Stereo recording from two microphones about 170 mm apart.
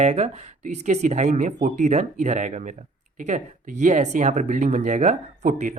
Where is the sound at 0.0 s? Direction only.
40° right (ahead or behind).